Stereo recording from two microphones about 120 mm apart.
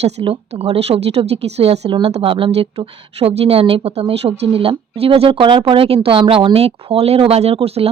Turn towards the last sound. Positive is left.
turn(degrees=-55)  # may be behind; listen again after turning